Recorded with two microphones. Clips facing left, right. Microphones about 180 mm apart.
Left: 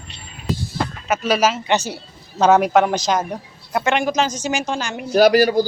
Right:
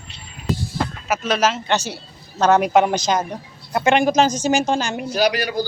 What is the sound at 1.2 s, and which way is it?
A woman's voice, 5° left (ahead or behind).